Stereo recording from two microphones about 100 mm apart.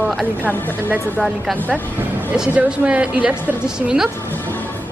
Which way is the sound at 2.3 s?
10° right (ahead or behind).